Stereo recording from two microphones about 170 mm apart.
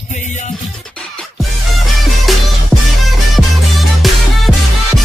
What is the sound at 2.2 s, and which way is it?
Music, centre (ahead or behind).